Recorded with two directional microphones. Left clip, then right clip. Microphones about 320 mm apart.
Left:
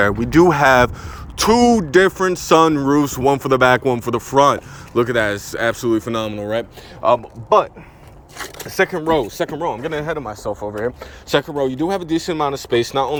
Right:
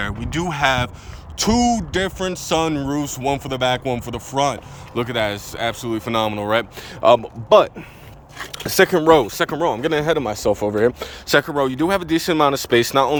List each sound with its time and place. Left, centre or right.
0.0 s speech: centre; by 11.1 s right
11.3 s speech: centre